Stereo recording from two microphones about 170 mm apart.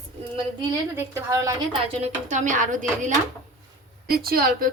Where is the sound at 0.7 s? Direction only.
15° right (ahead or behind).